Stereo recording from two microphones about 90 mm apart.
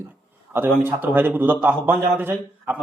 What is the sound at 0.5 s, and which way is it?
A man's voice, 25° right (ahead or behind).